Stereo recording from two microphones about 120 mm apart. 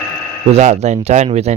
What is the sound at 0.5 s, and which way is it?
Speech, 65° right (ahead or behind).